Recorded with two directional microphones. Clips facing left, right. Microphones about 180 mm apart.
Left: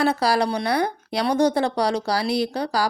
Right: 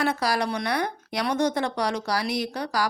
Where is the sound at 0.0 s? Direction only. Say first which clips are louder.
Left 5 dB; 30° left (ahead or behind).